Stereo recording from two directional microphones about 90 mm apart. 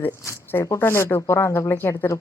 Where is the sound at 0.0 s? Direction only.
25° left (ahead or behind).